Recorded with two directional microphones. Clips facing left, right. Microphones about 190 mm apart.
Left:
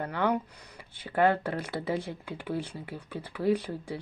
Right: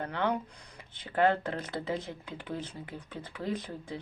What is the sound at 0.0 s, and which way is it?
Speech, 10° left (ahead or behind).